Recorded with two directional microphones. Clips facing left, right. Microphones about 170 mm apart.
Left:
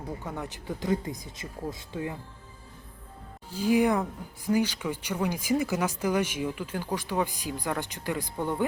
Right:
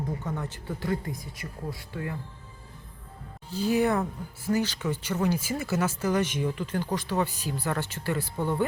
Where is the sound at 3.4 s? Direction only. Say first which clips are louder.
Left 1 dB; 10° left (ahead or behind).